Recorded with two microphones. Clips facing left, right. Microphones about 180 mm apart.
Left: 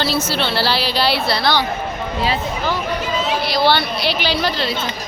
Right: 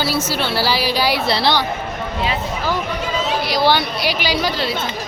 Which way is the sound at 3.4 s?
15° right (ahead or behind).